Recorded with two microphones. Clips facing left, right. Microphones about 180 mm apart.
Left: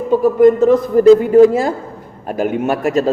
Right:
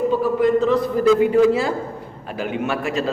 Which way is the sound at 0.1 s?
45° left (ahead or behind).